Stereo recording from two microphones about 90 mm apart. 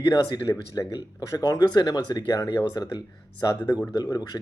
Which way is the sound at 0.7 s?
40° left (ahead or behind).